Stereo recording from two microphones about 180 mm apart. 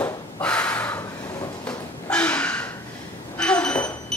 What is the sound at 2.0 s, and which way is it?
Gasp, 5° left (ahead or behind).